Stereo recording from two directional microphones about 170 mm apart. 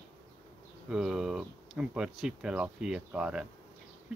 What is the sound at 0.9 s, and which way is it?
Speech, 5° right (ahead or behind).